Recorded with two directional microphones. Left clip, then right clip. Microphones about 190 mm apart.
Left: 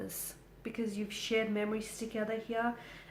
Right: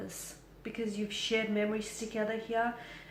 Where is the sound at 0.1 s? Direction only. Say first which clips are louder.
Right 1 dB; 40° left (ahead or behind).